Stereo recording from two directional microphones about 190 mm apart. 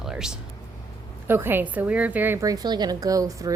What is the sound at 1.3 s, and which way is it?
A woman's voice, 10° right (ahead or behind).